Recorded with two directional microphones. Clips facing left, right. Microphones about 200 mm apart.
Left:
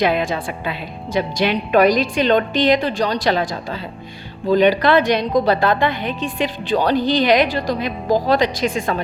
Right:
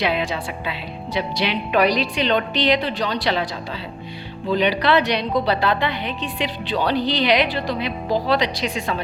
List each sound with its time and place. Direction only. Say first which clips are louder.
0.0 s a woman's voice: left 4 dB; 50° left (ahead or behind)